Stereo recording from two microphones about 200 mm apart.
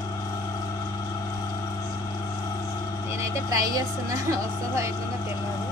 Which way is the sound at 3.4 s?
20° right (ahead or behind).